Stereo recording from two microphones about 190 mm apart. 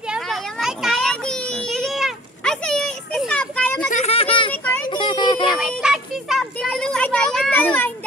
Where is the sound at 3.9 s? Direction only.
30° left (ahead or behind).